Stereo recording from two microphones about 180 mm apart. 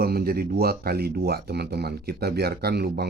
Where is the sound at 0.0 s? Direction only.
60° right (ahead or behind).